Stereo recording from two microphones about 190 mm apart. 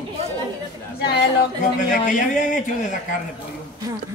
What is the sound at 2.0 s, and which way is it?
Speech, 40° left (ahead or behind).